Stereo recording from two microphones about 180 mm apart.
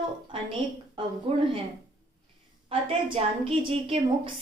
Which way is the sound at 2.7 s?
30° right (ahead or behind).